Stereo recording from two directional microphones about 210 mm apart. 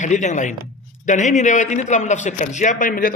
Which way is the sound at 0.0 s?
35° left (ahead or behind).